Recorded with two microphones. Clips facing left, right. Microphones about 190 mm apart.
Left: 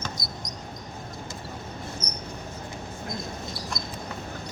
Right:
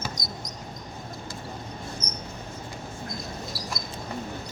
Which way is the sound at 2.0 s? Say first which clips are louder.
Even; 10° left (ahead or behind).